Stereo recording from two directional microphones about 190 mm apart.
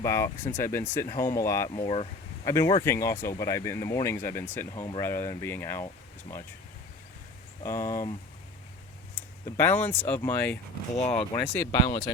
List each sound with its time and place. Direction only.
0.0 s speech: 15° left (ahead or behind)
1.7 s speech: 30° left (ahead or behind)
2.4 s speech: 15° left (ahead or behind)
7.6 s speech: 15° left (ahead or behind)
9.6 s speech: 10° left (ahead or behind)
10.9 s speech: 35° left (ahead or behind)
11.5 s speech: 15° left (ahead or behind)